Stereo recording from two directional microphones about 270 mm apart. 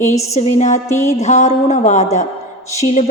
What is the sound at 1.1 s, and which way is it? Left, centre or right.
A woman's voice, left.